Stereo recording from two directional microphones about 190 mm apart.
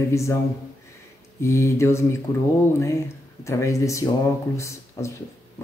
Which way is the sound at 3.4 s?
15° left (ahead or behind).